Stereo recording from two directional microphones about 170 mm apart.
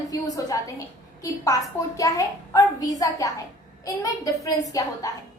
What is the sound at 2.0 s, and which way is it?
A woman's voice, 20° left (ahead or behind).